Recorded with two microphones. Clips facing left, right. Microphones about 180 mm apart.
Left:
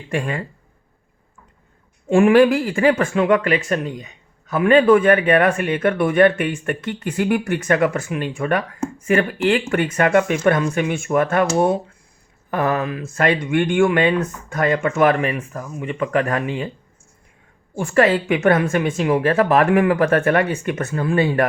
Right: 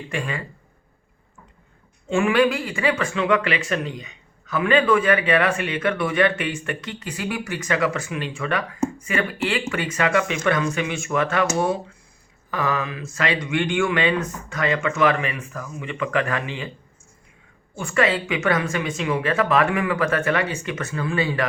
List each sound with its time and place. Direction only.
2.0 s speech: 50° left (ahead or behind)
12.5 s speech: 55° left (ahead or behind)
17.8 s speech: 50° left (ahead or behind)